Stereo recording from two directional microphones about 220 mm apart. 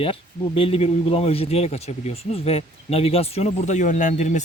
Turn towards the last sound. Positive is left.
turn(degrees=35)  # may be behind; listen again after turning